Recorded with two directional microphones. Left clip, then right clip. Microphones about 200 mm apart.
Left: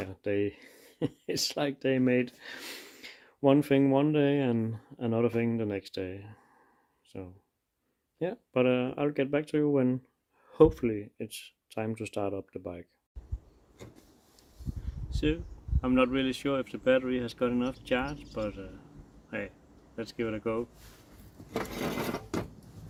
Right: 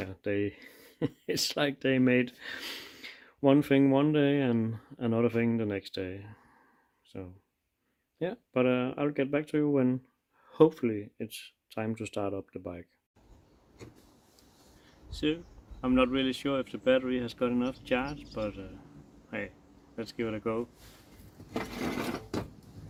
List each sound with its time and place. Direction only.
0.0 s speech: centre (ahead or behind)
15.1 s speech: centre (ahead or behind)
21.5 s a sound: 60° left (ahead or behind)